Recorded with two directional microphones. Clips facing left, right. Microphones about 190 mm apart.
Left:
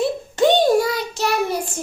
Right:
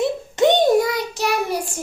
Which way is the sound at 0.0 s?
20° right (ahead or behind).